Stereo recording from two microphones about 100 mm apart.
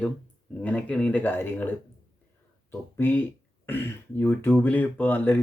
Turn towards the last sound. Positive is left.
turn(degrees=20)  # may be behind; listen again after turning